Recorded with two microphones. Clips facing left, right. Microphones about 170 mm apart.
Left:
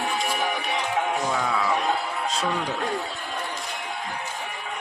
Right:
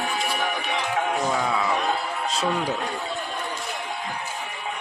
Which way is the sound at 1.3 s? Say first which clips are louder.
Right 1 dB; 10° right (ahead or behind).